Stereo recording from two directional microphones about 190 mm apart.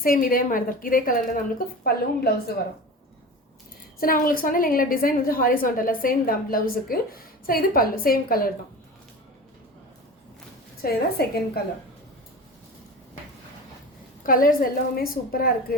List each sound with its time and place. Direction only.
0.0 s a woman's voice: 50° left (ahead or behind)
4.0 s a woman's voice: 50° left (ahead or behind)
10.8 s a woman's voice: 55° left (ahead or behind)
14.3 s a woman's voice: 50° left (ahead or behind)